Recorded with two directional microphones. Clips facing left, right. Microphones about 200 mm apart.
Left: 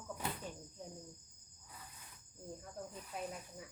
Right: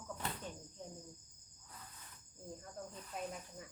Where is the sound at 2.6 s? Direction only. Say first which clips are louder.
Left 1 dB; 5° left (ahead or behind).